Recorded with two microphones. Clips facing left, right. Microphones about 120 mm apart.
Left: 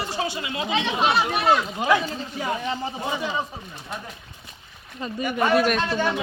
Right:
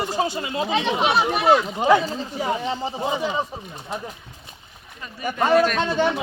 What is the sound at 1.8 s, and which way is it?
Speech, 35° right (ahead or behind).